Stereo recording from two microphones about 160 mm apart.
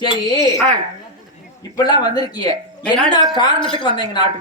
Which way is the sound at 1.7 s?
25° left (ahead or behind).